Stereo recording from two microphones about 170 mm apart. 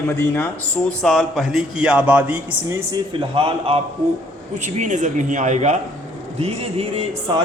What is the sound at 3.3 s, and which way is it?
Speech, 30° right (ahead or behind).